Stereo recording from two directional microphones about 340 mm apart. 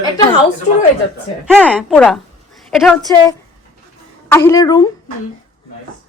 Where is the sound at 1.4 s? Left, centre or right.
Centre.